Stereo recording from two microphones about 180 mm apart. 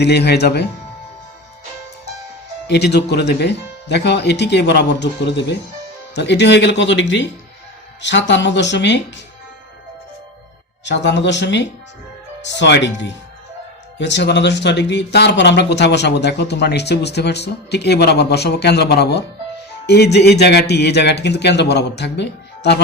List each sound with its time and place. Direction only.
0.0 s speech: 70° left (ahead or behind)
2.6 s speech: 65° left (ahead or behind)
10.8 s speech: 75° left (ahead or behind)